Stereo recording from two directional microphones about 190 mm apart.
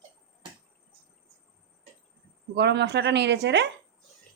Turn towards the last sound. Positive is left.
turn(degrees=-65)  # may be behind; listen again after turning